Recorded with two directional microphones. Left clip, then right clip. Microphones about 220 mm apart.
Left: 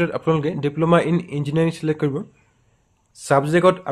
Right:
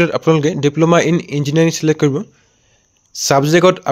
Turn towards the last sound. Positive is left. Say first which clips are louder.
# right 5 dB
turn(degrees=-35)  # may be behind; listen again after turning